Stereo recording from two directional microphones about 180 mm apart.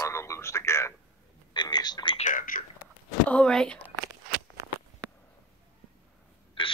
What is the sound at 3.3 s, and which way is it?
Speech, 5° left (ahead or behind).